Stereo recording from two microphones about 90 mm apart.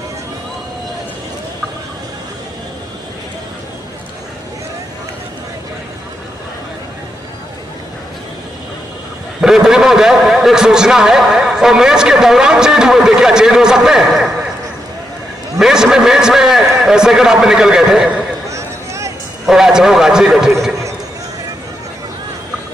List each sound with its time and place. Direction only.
9.4 s a man's voice: 5° right (ahead or behind)
15.6 s a man's voice: 5° right (ahead or behind)
18.5 s a sound: 35° right (ahead or behind)
19.4 s a man's voice: 5° right (ahead or behind)